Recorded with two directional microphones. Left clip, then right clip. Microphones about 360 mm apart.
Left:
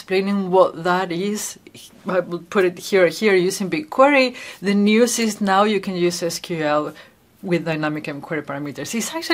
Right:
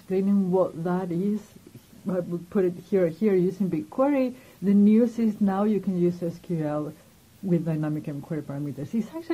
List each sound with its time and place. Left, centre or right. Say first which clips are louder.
0.1 s speech: left 6 dB; centre
0.5 s speech: left 11 dB; centre
0.8 s speech: left 9 dB; centre